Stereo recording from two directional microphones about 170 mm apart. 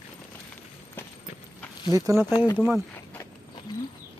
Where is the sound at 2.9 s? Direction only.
10° left (ahead or behind).